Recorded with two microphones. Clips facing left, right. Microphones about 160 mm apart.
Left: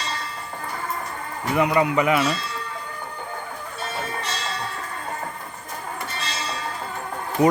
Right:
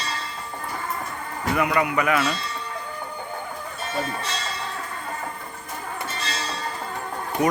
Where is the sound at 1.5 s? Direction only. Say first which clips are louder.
Left 3 dB; 25° left (ahead or behind).